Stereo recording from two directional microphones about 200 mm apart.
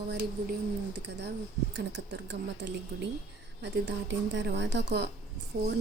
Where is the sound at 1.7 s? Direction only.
60° right (ahead or behind).